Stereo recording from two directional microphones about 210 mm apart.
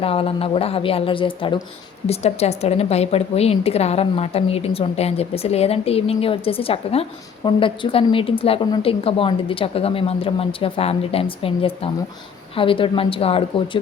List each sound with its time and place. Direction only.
0.0 s a woman's voice: 25° left (ahead or behind)